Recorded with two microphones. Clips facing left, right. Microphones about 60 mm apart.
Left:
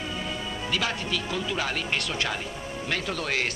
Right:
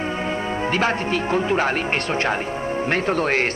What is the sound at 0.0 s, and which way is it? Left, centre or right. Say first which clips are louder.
Speech: right 8 dB; right.